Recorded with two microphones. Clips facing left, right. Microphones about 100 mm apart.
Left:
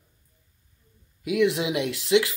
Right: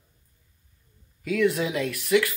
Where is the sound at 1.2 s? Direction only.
20° left (ahead or behind).